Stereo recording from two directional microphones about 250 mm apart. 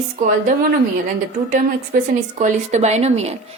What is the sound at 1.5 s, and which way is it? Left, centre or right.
A woman's voice, right.